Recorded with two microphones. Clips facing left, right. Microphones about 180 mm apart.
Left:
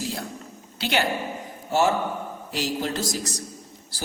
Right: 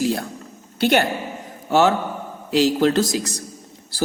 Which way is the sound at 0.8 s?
55° right (ahead or behind).